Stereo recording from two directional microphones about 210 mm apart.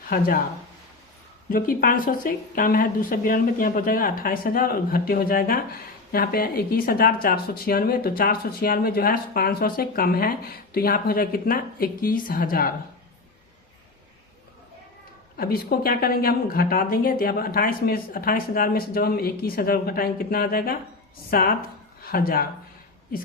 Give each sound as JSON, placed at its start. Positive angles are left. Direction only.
{"t": 1.5, "sound": "speech", "side_deg": 40}
{"t": 15.4, "sound": "speech", "side_deg": 45}